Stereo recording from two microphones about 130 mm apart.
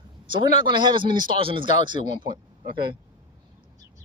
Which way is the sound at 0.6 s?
35° right (ahead or behind).